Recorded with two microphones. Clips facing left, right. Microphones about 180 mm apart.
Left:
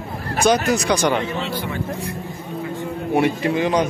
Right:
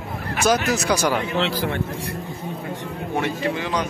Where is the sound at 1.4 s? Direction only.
90° right.